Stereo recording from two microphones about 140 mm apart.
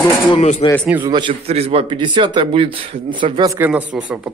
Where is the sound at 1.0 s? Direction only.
35° right (ahead or behind).